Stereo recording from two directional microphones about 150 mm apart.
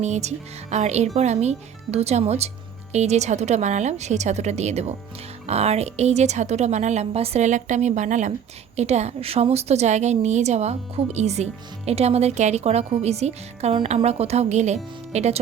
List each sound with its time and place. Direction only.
0.0 s a woman's voice: 50° right (ahead or behind)